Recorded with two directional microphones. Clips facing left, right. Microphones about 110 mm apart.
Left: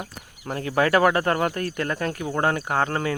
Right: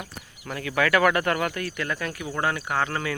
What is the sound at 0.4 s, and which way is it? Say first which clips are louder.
Speech: left 3 dB; 35° left (ahead or behind).